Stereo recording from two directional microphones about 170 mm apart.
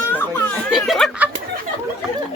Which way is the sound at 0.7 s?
Centre (ahead or behind).